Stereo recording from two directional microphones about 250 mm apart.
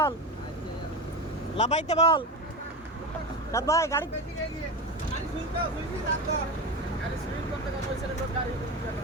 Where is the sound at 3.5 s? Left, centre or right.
Centre.